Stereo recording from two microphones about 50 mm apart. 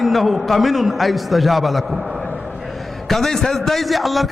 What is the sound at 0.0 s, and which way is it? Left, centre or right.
A man's voice, centre.